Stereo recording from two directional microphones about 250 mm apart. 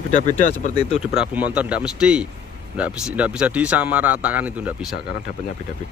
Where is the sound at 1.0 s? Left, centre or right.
Centre.